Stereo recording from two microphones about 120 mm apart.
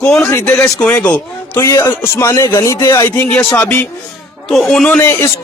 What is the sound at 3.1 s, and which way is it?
Speech, 10° left (ahead or behind).